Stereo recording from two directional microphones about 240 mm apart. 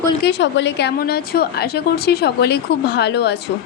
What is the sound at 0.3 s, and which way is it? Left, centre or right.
A woman's voice, left.